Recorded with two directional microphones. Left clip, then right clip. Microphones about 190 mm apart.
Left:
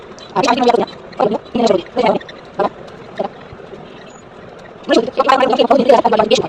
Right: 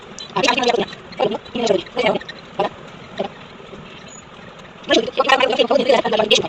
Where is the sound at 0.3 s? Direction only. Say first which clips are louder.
Left 4 dB; 10° left (ahead or behind).